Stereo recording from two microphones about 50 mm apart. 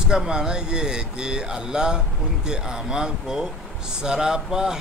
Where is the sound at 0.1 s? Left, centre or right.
Centre.